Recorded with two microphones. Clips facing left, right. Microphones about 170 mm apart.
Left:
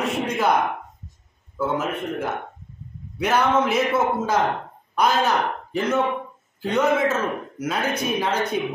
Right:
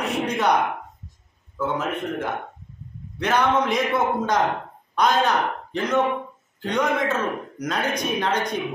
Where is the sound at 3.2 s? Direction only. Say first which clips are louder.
Left 1 dB; 10° left (ahead or behind).